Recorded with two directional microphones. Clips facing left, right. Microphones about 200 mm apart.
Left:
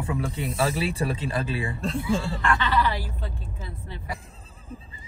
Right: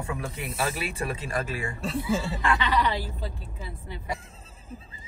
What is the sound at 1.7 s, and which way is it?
Speech, centre (ahead or behind).